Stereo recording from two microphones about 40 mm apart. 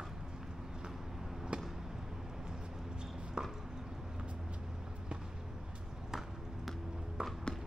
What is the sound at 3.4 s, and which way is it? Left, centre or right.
Chopping, right.